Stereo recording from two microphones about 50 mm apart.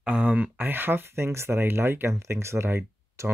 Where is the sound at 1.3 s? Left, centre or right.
Right.